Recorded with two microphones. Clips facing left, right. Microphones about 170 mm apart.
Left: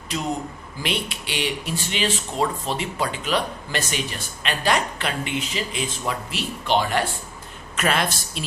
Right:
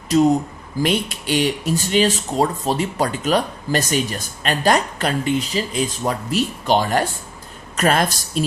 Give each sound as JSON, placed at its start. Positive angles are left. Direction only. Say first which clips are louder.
{"t": 0.8, "sound": "a woman's voice", "louder": "right 8 dB", "side_deg": -45}